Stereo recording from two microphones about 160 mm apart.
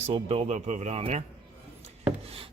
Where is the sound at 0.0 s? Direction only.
40° right (ahead or behind).